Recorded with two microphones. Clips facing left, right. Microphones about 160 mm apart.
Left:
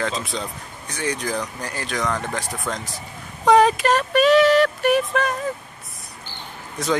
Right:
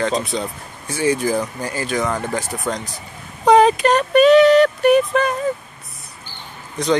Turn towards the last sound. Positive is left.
turn(degrees=0)  # may be behind; listen again after turning